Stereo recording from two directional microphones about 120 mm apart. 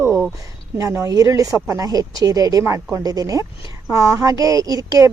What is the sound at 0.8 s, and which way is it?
A woman's voice, 25° right (ahead or behind).